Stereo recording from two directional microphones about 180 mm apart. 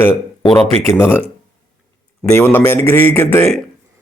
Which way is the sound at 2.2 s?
10° left (ahead or behind).